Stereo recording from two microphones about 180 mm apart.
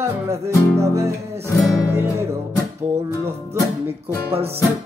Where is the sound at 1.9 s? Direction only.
15° right (ahead or behind).